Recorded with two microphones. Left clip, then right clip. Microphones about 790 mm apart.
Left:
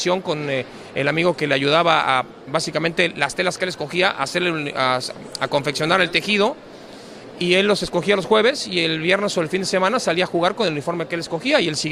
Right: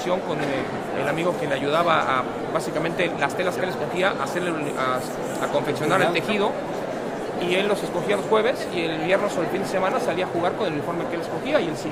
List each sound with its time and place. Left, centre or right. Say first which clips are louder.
1.0 s a man's voice: left 6 dB; left